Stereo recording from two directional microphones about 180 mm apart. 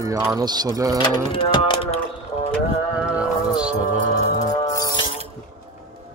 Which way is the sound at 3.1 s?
5° right (ahead or behind).